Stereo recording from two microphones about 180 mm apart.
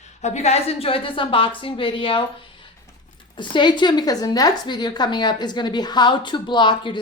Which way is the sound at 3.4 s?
25° left (ahead or behind).